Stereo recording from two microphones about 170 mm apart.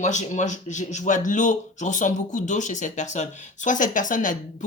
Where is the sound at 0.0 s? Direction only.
45° left (ahead or behind).